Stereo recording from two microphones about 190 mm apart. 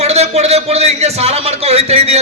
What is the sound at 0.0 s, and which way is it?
A man's voice, 35° right (ahead or behind).